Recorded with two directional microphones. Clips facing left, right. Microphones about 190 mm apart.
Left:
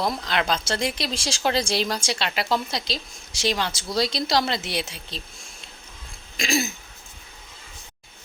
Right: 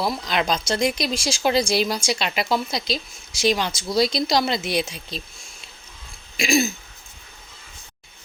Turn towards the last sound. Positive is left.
turn(degrees=-10)  # may be behind; listen again after turning